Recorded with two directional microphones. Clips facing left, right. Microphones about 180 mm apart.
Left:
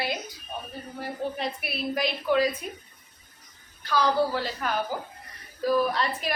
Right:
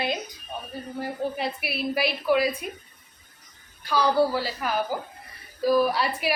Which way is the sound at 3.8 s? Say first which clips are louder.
Right 2 dB; 10° right (ahead or behind).